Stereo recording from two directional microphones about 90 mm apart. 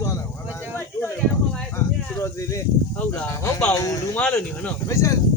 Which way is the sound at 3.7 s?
40° left (ahead or behind).